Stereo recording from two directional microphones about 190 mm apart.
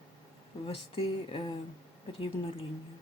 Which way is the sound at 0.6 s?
30° left (ahead or behind).